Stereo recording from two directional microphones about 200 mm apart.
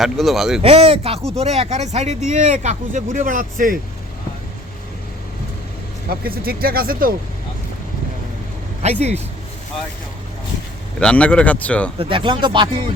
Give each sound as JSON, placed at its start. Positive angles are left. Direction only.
{"t": 0.0, "sound": "speech", "side_deg": 0}
{"t": 0.6, "sound": "speech", "side_deg": -30}
{"t": 6.1, "sound": "speech", "side_deg": -50}
{"t": 8.8, "sound": "speech", "side_deg": -35}
{"t": 11.0, "sound": "speech", "side_deg": 5}
{"t": 11.9, "sound": "speech", "side_deg": -25}